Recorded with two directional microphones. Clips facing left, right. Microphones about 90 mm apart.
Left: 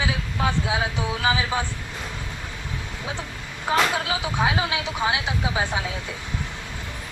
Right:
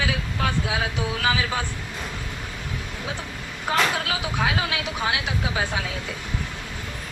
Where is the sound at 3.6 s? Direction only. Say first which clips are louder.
Left 1 dB; 20° left (ahead or behind).